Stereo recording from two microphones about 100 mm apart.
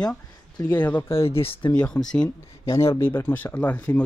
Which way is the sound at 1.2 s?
70° left (ahead or behind).